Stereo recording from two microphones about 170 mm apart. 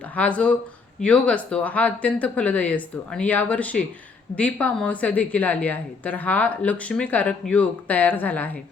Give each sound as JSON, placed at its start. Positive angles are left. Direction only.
{"t": 0.2, "sound": "a woman's voice", "side_deg": 5}